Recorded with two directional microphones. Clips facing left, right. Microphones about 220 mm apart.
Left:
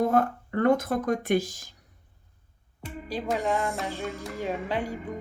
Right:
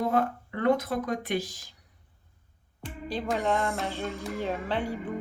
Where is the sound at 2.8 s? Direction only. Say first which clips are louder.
Left 1 dB; 10° left (ahead or behind).